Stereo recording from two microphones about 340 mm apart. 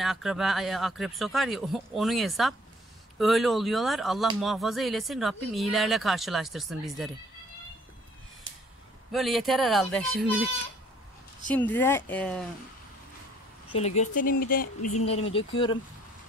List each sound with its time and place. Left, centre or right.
0.0 s speech: centre
9.1 s speech: centre
13.7 s speech: centre
14.8 s speech: left
15.3 s speech: centre